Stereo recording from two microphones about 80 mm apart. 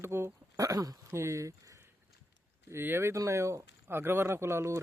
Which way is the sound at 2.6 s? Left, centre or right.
Right.